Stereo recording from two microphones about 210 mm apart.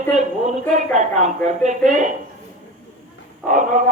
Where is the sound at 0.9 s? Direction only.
35° right (ahead or behind).